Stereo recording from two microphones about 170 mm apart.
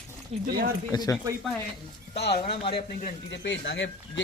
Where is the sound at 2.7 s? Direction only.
65° left (ahead or behind).